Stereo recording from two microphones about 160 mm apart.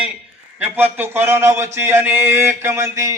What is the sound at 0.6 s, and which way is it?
A man's voice, 10° right (ahead or behind).